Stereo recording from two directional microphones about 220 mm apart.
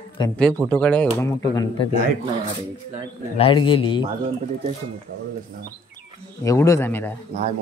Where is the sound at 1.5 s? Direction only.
15° left (ahead or behind).